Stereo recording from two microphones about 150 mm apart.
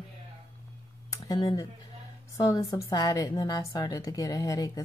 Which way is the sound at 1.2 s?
25° left (ahead or behind).